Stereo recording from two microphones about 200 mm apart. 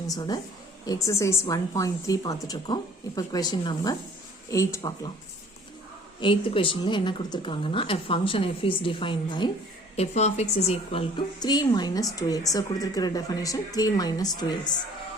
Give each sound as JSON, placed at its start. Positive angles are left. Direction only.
{"t": 0.1, "sound": "a woman's voice", "side_deg": 20}
{"t": 6.1, "sound": "speech", "side_deg": 25}
{"t": 11.3, "sound": "speech", "side_deg": 20}